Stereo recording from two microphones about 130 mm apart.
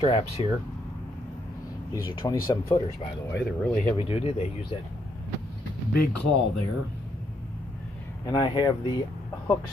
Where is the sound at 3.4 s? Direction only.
5° left (ahead or behind).